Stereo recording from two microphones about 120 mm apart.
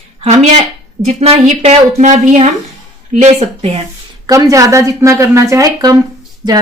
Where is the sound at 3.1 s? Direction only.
65° right (ahead or behind).